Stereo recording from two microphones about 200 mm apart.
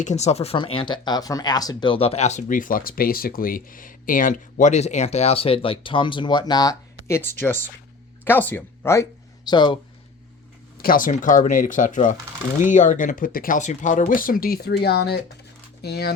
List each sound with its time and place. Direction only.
0.0 s speech: 35° left (ahead or behind)
10.8 s speech: 45° left (ahead or behind)